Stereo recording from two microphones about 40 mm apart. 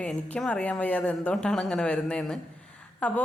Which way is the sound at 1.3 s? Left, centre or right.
Left.